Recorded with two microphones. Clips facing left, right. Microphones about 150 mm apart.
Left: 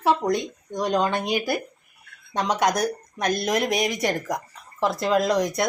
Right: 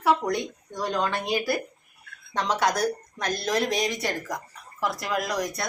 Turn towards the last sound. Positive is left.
turn(degrees=20)  # may be behind; listen again after turning